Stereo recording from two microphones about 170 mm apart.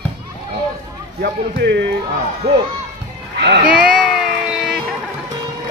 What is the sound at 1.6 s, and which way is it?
Speech, 90° right.